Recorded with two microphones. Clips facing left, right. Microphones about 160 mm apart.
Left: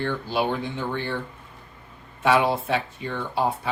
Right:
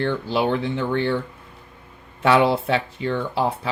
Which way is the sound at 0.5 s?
75° right (ahead or behind).